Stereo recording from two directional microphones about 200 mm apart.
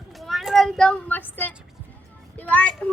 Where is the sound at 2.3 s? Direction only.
5° left (ahead or behind).